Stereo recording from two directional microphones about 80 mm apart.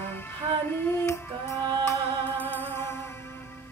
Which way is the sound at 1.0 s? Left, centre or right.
Left.